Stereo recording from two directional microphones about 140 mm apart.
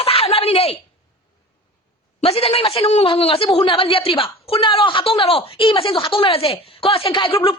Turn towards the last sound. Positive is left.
turn(degrees=40)  # may be behind; listen again after turning